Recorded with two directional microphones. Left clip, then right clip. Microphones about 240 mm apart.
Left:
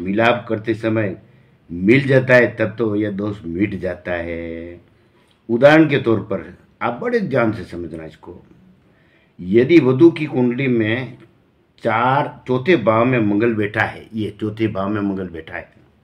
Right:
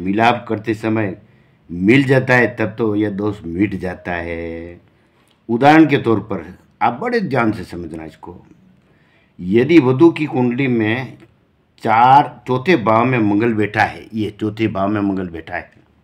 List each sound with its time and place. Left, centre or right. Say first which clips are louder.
0.0 s speech: right 1 dB; right
9.4 s speech: right 1 dB; right